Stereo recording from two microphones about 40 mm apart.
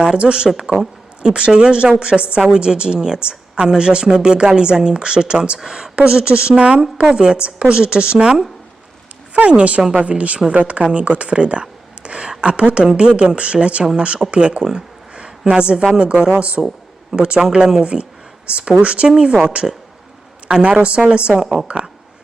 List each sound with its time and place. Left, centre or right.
0.0 s a woman's voice: right
0.5 s a woman's voice: centre
1.2 s a woman's voice: right
9.3 s a woman's voice: right
14.6 s a sound: centre
16.0 s a woman's voice: right
16.6 s a sound: centre
17.2 s a woman's voice: right
18.4 s a woman's voice: right
20.5 s a woman's voice: right
21.3 s a woman's voice: centre